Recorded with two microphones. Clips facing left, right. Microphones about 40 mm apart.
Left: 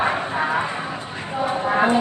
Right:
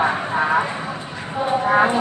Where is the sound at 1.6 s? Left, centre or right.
Right.